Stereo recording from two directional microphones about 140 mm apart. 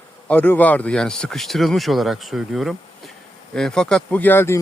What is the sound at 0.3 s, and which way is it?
Speech, 10° left (ahead or behind).